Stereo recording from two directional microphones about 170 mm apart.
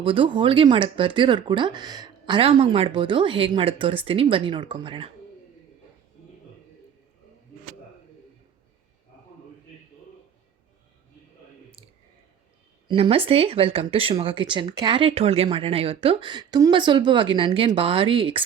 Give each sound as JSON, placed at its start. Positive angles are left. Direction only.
{"t": 0.0, "sound": "speech", "side_deg": -30}
{"t": 12.9, "sound": "speech", "side_deg": -35}